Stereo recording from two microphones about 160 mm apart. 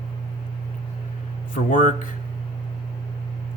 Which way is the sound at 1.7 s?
55° left (ahead or behind).